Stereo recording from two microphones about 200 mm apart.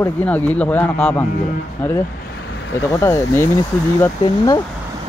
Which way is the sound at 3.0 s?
15° left (ahead or behind).